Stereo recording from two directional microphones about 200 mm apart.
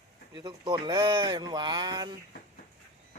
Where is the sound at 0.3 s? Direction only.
20° right (ahead or behind).